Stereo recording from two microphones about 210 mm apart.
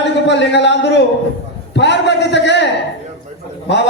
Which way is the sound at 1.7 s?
55° left (ahead or behind).